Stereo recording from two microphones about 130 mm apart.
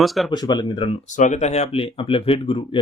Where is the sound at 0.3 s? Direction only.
35° left (ahead or behind).